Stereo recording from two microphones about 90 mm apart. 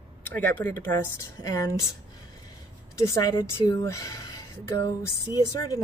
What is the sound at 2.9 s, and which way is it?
Speech, 40° left (ahead or behind).